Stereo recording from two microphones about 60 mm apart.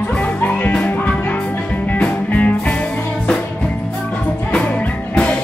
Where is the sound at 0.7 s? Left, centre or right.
Left.